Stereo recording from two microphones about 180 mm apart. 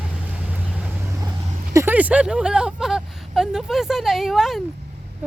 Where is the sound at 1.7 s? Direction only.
10° right (ahead or behind).